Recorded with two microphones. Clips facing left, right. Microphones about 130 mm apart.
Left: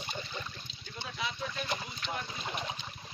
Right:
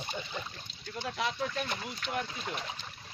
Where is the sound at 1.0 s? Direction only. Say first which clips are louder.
Right 4 dB; 65° right (ahead or behind).